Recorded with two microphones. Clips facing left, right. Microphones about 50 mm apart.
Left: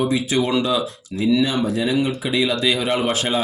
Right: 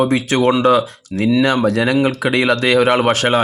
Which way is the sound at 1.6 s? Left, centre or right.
Right.